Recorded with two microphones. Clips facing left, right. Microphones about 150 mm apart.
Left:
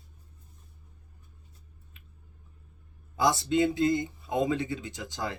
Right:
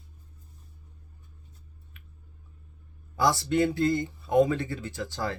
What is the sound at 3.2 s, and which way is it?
Speech, 20° left (ahead or behind).